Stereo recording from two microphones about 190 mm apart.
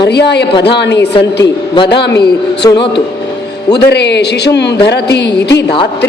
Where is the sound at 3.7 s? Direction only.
60° left (ahead or behind).